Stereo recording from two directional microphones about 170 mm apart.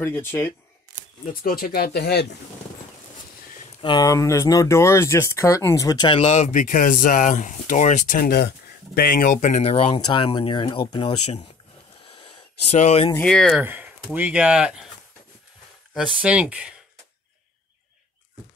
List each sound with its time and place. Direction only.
0.0 s speech: 15° left (ahead or behind)
1.2 s speech: 55° left (ahead or behind); by 2.2 s 70° left (ahead or behind)
3.8 s speech: 25° left (ahead or behind)
12.1 s a sound: 35° left (ahead or behind)
13.2 s speech: 5° left (ahead or behind)
13.6 s speech: 10° right (ahead or behind)
15.9 s speech: 5° right (ahead or behind)